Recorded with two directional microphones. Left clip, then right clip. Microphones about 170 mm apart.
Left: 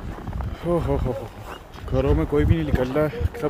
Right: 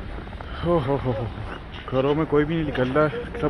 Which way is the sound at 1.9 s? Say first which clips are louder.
Right 1 dB; 20° left (ahead or behind).